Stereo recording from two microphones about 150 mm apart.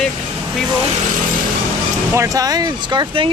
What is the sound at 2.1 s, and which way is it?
Speech, 25° right (ahead or behind).